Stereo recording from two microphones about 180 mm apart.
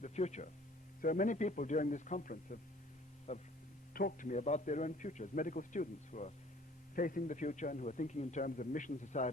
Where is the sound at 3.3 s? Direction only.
35° left (ahead or behind).